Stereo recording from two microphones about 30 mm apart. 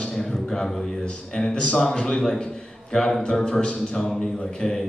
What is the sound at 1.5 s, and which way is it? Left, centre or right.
Speech, left.